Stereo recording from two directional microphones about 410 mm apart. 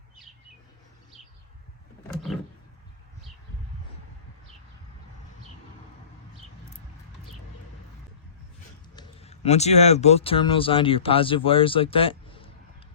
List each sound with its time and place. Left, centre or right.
9.0 s speech: centre